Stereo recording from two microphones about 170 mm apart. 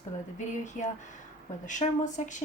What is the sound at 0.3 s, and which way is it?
A woman's voice, 45° left (ahead or behind).